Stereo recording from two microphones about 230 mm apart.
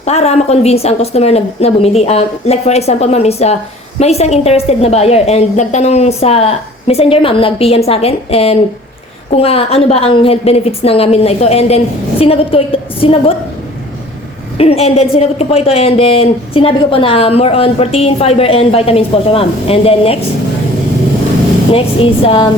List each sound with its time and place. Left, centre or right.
0.0 s speech: left
14.6 s speech: left
21.7 s speech: left